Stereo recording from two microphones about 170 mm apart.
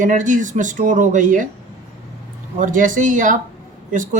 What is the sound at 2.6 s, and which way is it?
Speech, 50° right (ahead or behind).